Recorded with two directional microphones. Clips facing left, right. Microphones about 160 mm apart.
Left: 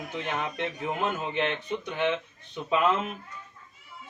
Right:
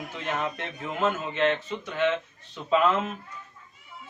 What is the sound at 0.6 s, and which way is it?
Speech, 15° left (ahead or behind).